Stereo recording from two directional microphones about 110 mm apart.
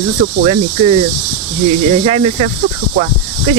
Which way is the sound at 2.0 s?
65° right (ahead or behind).